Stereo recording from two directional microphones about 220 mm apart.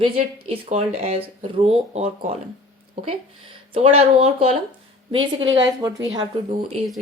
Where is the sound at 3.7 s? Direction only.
25° right (ahead or behind).